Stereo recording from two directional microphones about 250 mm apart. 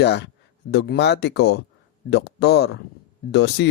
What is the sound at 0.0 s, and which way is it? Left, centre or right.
Speech, left.